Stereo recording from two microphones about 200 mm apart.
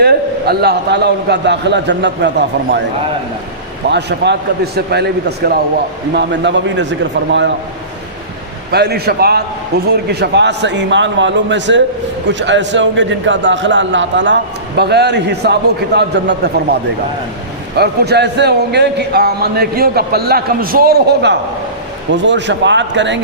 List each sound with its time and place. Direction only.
0.0 s a man's voice: 55° right (ahead or behind)
3.8 s a man's voice: 60° right (ahead or behind)
8.7 s a man's voice: 55° right (ahead or behind)
17.7 s a man's voice: 55° right (ahead or behind)